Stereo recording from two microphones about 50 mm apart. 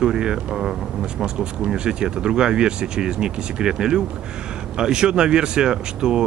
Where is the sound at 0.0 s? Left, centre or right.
Centre.